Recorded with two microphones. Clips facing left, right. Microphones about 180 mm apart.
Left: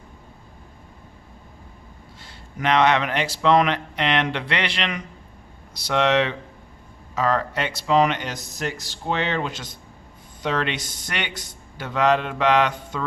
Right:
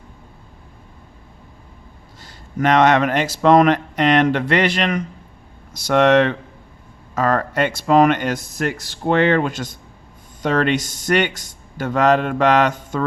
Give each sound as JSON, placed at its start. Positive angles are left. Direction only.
{"t": 2.2, "sound": "speech", "side_deg": -45}